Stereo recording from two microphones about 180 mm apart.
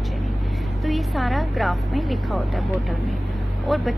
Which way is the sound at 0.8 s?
Centre (ahead or behind).